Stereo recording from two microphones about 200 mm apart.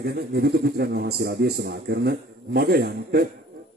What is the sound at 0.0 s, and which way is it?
A man's voice, 55° right (ahead or behind).